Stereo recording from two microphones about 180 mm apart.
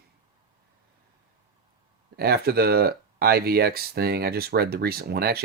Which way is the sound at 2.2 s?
60° right (ahead or behind).